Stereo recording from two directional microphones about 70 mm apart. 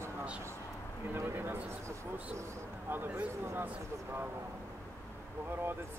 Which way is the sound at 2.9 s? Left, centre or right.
Right.